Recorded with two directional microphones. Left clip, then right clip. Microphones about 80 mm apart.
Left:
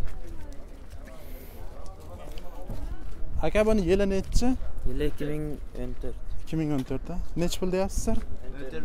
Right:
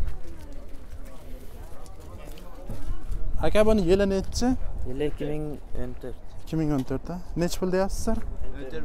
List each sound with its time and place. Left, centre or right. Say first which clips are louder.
3.3 s speech: right 3 dB; centre
4.9 s speech: right 2 dB; left
6.1 s speech: right 2 dB; centre
8.5 s speech: right 1 dB; right